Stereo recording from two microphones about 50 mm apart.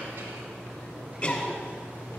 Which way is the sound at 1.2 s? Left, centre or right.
Centre.